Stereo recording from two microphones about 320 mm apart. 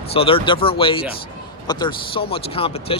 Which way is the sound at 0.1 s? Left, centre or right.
Centre.